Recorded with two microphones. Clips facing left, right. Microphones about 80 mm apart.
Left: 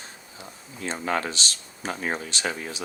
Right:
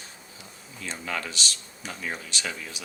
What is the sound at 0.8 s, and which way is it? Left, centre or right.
Speech, left.